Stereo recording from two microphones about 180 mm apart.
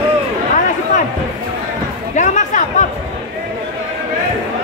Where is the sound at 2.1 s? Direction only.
40° left (ahead or behind).